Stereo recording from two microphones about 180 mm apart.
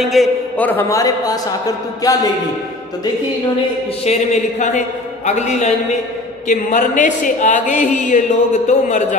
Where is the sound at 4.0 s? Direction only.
40° left (ahead or behind).